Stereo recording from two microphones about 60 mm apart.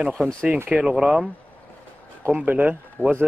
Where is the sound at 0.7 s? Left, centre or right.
Centre.